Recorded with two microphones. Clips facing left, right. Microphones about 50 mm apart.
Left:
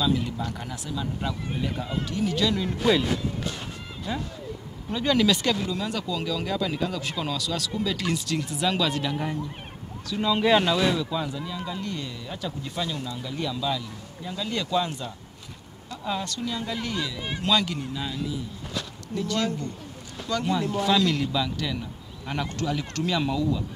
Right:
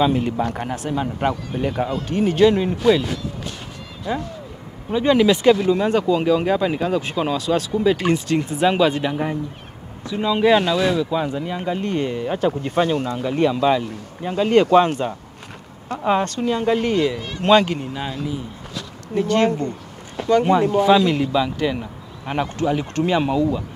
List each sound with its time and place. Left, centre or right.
0.0 s speech: right
2.0 s speech: right
4.9 s speech: right; by 11.0 s centre
11.0 s speech: right
11.2 s speech: right